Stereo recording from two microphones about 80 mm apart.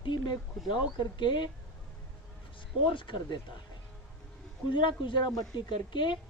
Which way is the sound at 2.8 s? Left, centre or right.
Left.